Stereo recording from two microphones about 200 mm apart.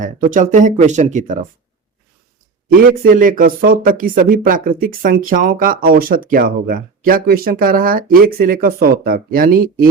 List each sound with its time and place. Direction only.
0.0 s speech: 40° right (ahead or behind)
3.0 s speech: 45° right (ahead or behind)